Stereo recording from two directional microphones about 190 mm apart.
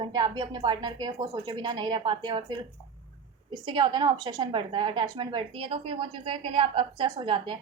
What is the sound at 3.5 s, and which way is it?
A woman's voice, 25° right (ahead or behind).